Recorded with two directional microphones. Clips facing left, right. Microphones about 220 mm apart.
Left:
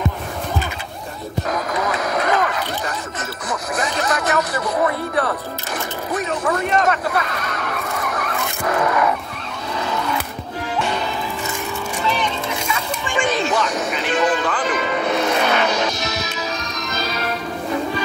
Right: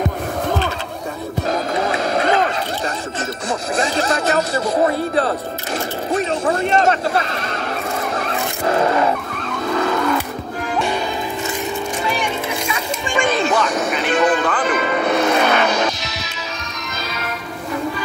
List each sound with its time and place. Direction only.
1.5 s music: 30° right (ahead or behind)
3.7 s speech: 30° right (ahead or behind)
6.1 s a sound: 25° right (ahead or behind)
9.5 s vehicle: 50° right (ahead or behind)
12.0 s vehicle: 10° right (ahead or behind)
13.2 s music: 50° right (ahead or behind)